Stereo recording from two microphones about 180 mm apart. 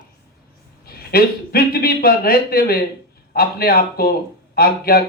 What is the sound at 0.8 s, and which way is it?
A man's voice, 60° left (ahead or behind).